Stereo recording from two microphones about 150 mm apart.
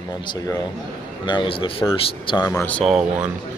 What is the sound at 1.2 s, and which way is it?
A man's voice, 30° left (ahead or behind).